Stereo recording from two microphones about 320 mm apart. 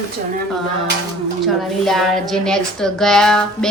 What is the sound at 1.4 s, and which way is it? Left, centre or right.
A woman's voice, centre.